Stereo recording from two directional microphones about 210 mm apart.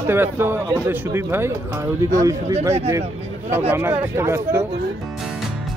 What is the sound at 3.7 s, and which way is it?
Speech, 10° right (ahead or behind).